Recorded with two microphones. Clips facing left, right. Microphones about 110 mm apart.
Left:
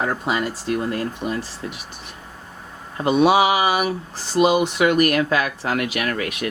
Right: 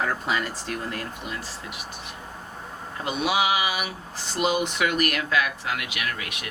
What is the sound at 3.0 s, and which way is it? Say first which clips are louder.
Speech: left 9 dB; 40° left (ahead or behind).